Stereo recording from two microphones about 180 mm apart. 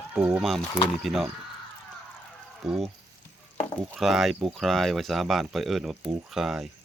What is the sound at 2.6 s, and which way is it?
Speech, centre (ahead or behind).